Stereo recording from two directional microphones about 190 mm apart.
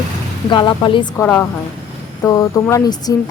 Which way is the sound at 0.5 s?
25° left (ahead or behind).